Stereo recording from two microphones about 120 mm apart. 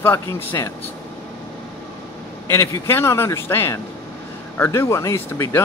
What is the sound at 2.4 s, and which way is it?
A man's voice, 25° left (ahead or behind).